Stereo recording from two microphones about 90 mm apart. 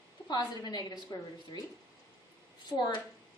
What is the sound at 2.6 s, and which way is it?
Speech, 55° left (ahead or behind).